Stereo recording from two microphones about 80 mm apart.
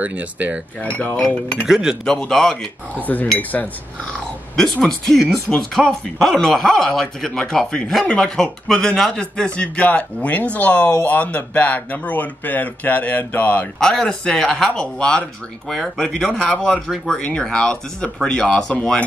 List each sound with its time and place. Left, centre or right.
0.0 s cutlery: centre
0.7 s speech: centre
1.7 s cutlery: centre
2.0 s speech: centre
3.3 s speech: left
4.7 s speech: centre
13.7 s speech: centre
16.9 s speech: centre
17.2 s speech: centre